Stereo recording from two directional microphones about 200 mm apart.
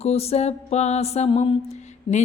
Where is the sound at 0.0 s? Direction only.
30° left (ahead or behind).